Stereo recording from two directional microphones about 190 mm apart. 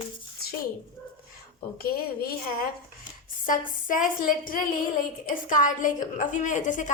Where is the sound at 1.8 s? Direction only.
50° left (ahead or behind).